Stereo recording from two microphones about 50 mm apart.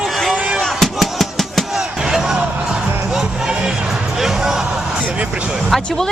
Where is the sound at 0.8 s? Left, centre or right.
Centre.